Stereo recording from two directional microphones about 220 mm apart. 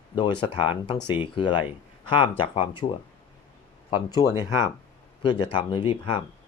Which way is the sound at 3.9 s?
15° left (ahead or behind).